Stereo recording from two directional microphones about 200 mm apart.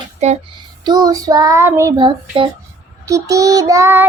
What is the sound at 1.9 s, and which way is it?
Child singing, 25° right (ahead or behind).